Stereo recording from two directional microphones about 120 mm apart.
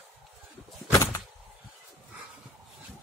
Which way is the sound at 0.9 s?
25° left (ahead or behind).